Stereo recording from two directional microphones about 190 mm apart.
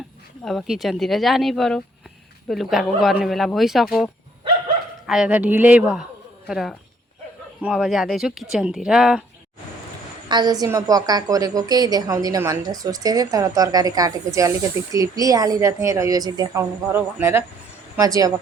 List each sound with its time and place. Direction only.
0.4 s speech: centre (ahead or behind)
10.2 s a woman's voice: 20° right (ahead or behind)